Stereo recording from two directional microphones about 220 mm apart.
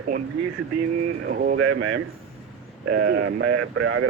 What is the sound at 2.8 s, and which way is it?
Speech, 55° right (ahead or behind).